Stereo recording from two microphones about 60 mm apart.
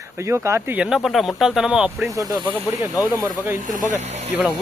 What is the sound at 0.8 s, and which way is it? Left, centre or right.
Speech, centre.